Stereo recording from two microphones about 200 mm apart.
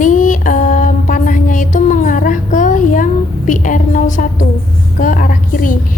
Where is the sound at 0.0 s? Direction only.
40° left (ahead or behind).